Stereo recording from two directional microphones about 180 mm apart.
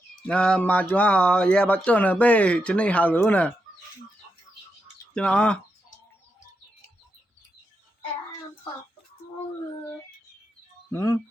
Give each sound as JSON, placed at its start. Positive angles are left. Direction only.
{"t": 0.3, "sound": "speech", "side_deg": 5}
{"t": 5.1, "sound": "speech", "side_deg": 5}
{"t": 10.9, "sound": "speech", "side_deg": 15}